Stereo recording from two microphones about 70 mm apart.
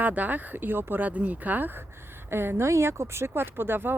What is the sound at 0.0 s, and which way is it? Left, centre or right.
Speech, right.